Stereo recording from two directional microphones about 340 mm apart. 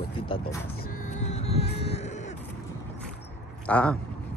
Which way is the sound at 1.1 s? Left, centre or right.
Centre.